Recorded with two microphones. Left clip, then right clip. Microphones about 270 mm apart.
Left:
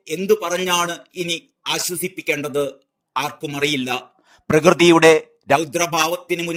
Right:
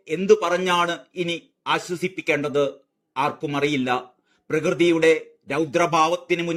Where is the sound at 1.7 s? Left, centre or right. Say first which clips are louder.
Even; centre.